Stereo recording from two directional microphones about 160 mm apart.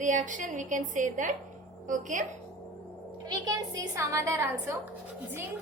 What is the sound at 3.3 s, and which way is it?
A woman's voice, 25° right (ahead or behind).